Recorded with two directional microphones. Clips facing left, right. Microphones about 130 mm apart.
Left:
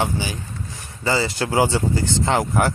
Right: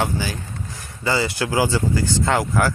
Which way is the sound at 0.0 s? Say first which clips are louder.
Even; 20° left (ahead or behind).